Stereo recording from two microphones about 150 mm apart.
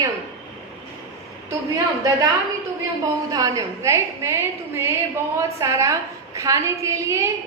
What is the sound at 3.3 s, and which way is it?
A woman's voice, 25° right (ahead or behind).